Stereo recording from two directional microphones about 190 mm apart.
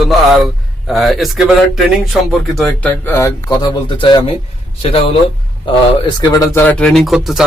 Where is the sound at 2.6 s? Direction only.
10° left (ahead or behind).